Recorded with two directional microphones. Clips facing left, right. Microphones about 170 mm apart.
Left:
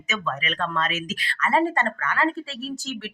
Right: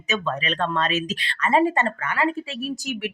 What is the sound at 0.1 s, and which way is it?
Speech, 30° right (ahead or behind).